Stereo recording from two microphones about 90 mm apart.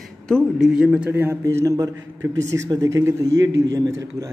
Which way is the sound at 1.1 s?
25° right (ahead or behind).